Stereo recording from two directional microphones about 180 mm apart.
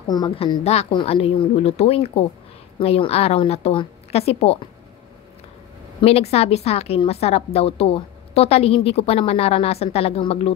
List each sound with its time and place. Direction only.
0.1 s a woman's voice: 25° left (ahead or behind)
5.9 s a woman's voice: 35° left (ahead or behind)